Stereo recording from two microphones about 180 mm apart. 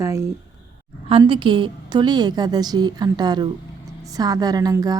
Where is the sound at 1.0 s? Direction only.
30° right (ahead or behind).